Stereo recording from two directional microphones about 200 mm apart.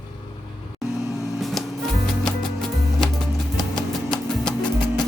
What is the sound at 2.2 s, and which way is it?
Music, 5° left (ahead or behind).